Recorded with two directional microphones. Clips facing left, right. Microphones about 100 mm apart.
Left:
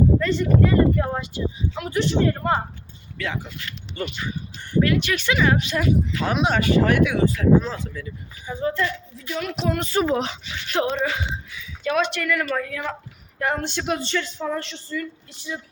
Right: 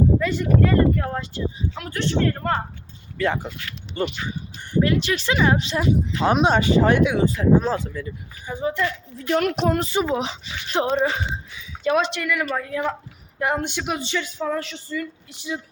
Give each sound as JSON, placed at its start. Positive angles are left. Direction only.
{"t": 0.2, "sound": "speech", "side_deg": -10}
{"t": 0.6, "sound": "speech", "side_deg": 5}
{"t": 1.0, "sound": "a man's voice", "side_deg": 15}
{"t": 3.2, "sound": "speech", "side_deg": -45}
{"t": 4.0, "sound": "speech", "side_deg": -30}
{"t": 7.6, "sound": "speech", "side_deg": -40}
{"t": 8.6, "sound": "speech", "side_deg": -15}
{"t": 9.1, "sound": "speech", "side_deg": -60}
{"t": 9.7, "sound": "speech", "side_deg": -25}
{"t": 10.0, "sound": "speech", "side_deg": -15}
{"t": 10.4, "sound": "speech", "side_deg": -25}
{"t": 13.4, "sound": "speech", "side_deg": -15}